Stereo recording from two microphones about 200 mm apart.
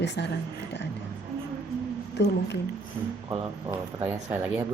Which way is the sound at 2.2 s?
60° left (ahead or behind).